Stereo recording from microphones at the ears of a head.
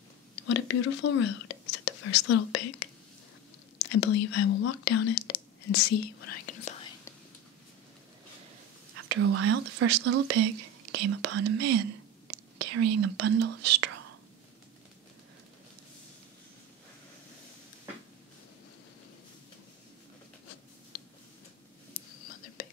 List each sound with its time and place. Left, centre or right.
0.4 s speech: left
8.9 s speech: right
21.9 s whispering: left